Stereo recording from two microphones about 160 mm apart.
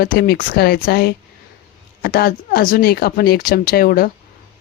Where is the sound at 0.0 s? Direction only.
75° left (ahead or behind).